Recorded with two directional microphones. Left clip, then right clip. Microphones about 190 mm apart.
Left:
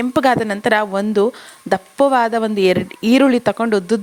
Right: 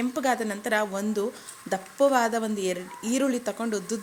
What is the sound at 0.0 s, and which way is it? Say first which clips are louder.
Speech: left 11 dB; 55° left (ahead or behind).